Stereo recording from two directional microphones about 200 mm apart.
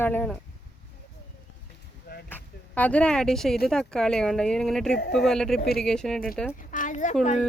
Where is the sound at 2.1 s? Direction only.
50° left (ahead or behind).